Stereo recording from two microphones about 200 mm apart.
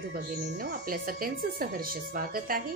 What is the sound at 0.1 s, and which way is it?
Speech, 50° right (ahead or behind).